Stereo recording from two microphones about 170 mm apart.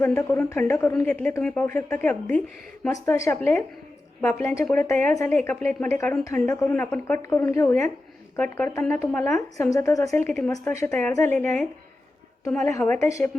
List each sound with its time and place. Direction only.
0.0 s a woman's voice: 15° left (ahead or behind)
12.8 s speech: 10° left (ahead or behind)